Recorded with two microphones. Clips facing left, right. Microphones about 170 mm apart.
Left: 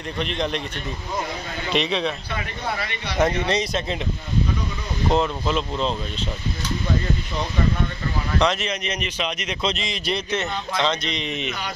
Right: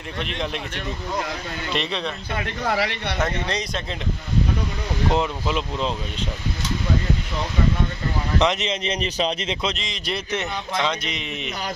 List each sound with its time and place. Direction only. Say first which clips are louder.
0.2 s speech: left 3 dB; 5° right (ahead or behind)
1.7 s speech: left 4 dB; centre (ahead or behind)
2.7 s speech: right 7 dB; 85° right
3.3 s speech: left 4 dB; 5° left (ahead or behind)
5.1 s speech: left 3 dB; 10° right (ahead or behind)
8.4 s speech: even; 20° right (ahead or behind)
9.0 s a man's voice: right 4 dB; 30° right (ahead or behind)
9.8 s a man's voice: left 3 dB; 5° left (ahead or behind)
10.8 s speech: left 2 dB; 10° right (ahead or behind)